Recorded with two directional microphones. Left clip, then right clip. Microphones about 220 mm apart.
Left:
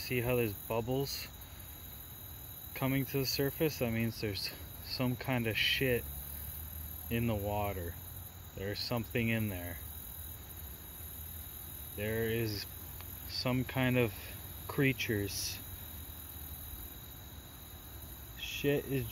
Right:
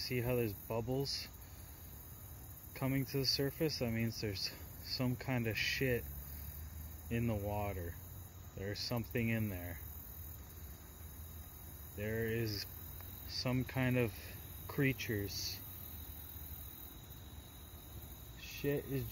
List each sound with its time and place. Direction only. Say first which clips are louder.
0.0 s speech: left 4 dB; centre (ahead or behind)
2.7 s speech: left 4 dB; centre (ahead or behind)
7.1 s speech: left 4 dB; centre (ahead or behind)
12.0 s speech: left 4 dB; centre (ahead or behind)
18.4 s speech: left 6 dB; 15° left (ahead or behind)